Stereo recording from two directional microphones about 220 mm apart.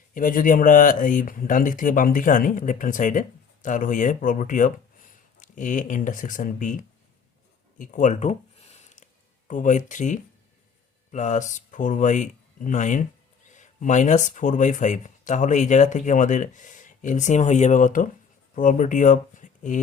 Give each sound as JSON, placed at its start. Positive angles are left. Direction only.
{"t": 0.1, "sound": "speech", "side_deg": 40}
{"t": 7.8, "sound": "a sound", "side_deg": 35}
{"t": 9.5, "sound": "speech", "side_deg": 35}